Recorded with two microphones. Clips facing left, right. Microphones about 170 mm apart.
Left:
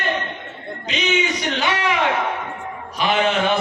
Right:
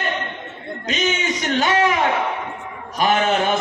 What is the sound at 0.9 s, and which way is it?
Speech, 45° right (ahead or behind).